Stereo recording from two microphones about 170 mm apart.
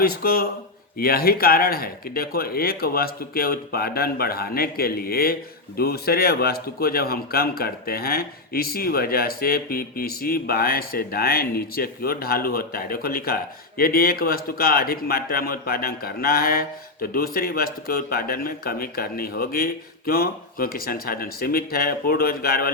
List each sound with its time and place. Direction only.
0.0 s speech: 60° left (ahead or behind)